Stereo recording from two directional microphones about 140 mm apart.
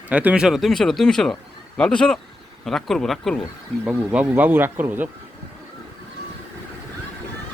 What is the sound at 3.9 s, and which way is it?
Speech, 10° right (ahead or behind).